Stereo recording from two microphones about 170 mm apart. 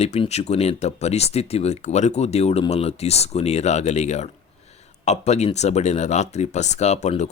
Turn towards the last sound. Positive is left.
turn(degrees=40)  # may be behind; listen again after turning